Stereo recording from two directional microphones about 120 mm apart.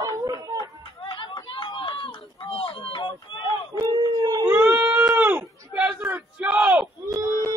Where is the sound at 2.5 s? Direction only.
45° left (ahead or behind).